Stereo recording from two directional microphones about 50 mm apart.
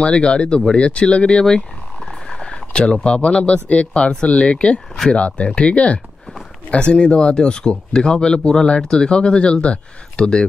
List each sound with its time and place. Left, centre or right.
0.0 s speech: centre